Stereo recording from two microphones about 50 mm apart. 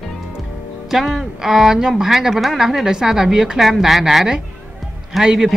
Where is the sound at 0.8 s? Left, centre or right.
Centre.